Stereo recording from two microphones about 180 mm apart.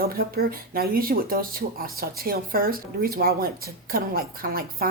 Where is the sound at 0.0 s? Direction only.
55° right (ahead or behind).